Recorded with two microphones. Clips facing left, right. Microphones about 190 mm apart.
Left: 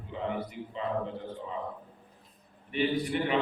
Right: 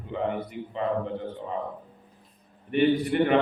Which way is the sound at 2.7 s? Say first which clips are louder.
Right 6 dB; 60° right (ahead or behind).